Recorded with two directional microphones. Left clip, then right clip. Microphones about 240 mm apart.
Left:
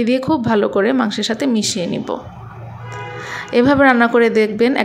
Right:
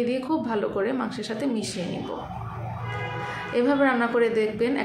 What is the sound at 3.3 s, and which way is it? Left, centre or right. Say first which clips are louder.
A woman's voice: left 10 dB; left.